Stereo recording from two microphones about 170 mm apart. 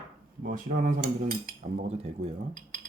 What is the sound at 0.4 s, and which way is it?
Cutlery, 50° right (ahead or behind).